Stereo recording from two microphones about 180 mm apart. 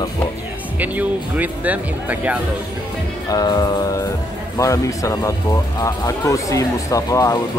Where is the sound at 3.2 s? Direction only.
20° left (ahead or behind).